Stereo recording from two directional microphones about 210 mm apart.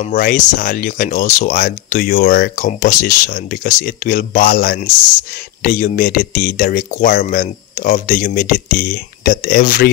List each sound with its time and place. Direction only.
0.0 s speech: 40° left (ahead or behind)